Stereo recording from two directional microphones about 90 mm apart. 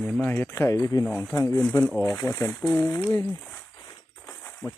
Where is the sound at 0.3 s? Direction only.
20° left (ahead or behind).